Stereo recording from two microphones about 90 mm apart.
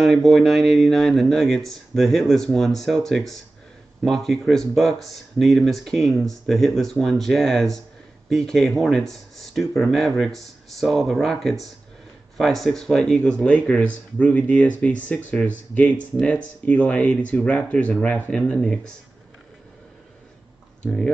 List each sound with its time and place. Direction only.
0.0 s speech: centre (ahead or behind); by 18.5 s 20° left (ahead or behind)
18.5 s speech: 5° left (ahead or behind)
20.8 s speech: 5° left (ahead or behind)